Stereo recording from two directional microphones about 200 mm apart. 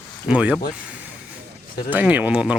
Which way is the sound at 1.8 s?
10° right (ahead or behind).